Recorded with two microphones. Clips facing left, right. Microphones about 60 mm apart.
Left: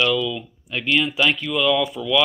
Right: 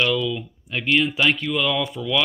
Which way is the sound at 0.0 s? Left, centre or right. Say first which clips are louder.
Left 1 dB; right.